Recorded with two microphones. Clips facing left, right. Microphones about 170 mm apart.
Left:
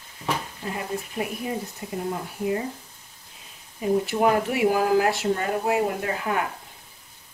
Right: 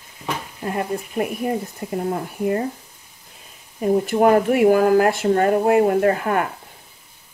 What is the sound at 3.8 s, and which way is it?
Speech, 50° right (ahead or behind).